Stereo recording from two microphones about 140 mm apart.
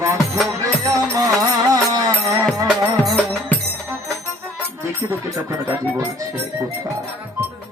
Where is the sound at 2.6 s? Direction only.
Centre (ahead or behind).